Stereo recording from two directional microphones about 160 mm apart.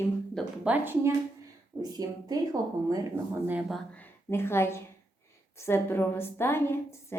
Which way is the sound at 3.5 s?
10° right (ahead or behind).